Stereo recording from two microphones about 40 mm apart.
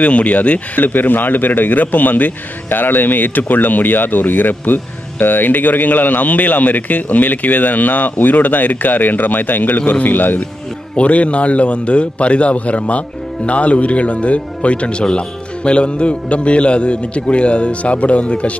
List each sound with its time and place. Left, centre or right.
0.0 s speech: left
11.0 s speech: left